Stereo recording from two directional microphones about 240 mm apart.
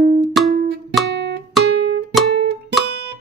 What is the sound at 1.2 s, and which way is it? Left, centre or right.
Guitar, right.